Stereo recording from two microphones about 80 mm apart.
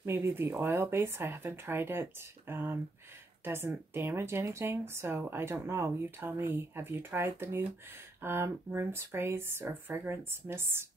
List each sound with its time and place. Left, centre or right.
0.0 s speech: right